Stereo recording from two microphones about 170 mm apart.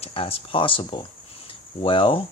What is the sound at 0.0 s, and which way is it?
Speech, 35° left (ahead or behind).